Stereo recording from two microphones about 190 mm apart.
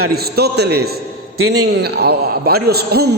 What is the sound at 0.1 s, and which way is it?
A man's voice, 55° right (ahead or behind).